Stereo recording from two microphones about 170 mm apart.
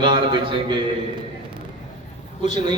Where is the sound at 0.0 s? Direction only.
30° right (ahead or behind).